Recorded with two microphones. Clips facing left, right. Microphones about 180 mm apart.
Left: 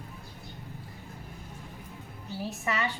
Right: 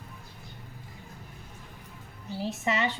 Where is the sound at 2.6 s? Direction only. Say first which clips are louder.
Right 3 dB; 25° right (ahead or behind).